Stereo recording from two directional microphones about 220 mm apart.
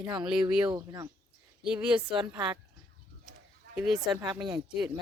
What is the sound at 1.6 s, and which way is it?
Speech, 5° right (ahead or behind).